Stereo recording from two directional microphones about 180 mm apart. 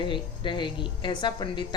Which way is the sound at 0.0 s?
25° left (ahead or behind).